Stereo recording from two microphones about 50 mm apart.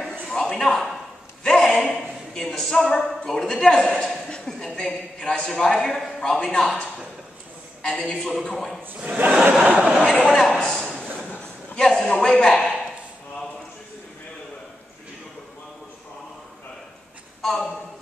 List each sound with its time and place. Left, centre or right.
0.3 s a sound: centre
2.3 s a man's voice: centre
8.0 s a man's voice: centre
9.0 s speech: right
9.3 s speech: centre
10.3 s a man's voice: centre
11.3 s a man's voice: centre
17.4 s a sound: centre